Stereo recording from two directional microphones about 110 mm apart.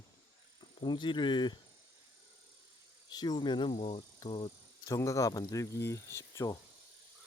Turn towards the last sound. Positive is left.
turn(degrees=30)  # may be behind; listen again after turning